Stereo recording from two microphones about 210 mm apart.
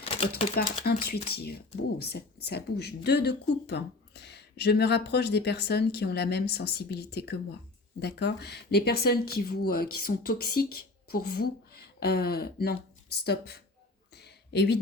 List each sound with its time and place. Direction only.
0.0 s typewriter: 30° left (ahead or behind)
0.5 s speech: 50° left (ahead or behind)
14.2 s a sound: 50° left (ahead or behind)